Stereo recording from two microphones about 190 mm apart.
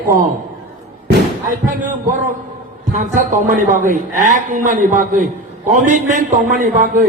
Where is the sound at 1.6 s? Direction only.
45° right (ahead or behind).